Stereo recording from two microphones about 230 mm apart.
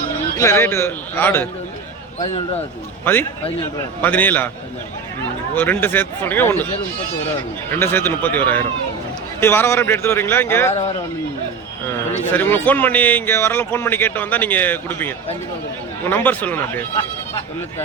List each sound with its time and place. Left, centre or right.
0.3 s a man's voice: centre
2.1 s speech: left
3.0 s a man's voice: centre
5.5 s a man's voice: centre
7.7 s a man's voice: centre
10.7 s a man's voice: left
12.3 s a man's voice: centre